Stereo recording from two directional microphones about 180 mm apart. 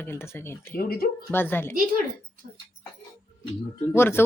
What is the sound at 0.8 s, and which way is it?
Speech, 60° left (ahead or behind).